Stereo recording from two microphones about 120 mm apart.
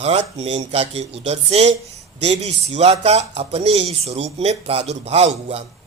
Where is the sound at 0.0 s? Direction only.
60° right (ahead or behind).